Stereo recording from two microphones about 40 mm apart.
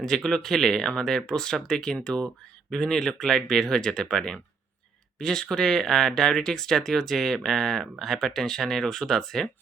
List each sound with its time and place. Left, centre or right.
0.0 s speech: centre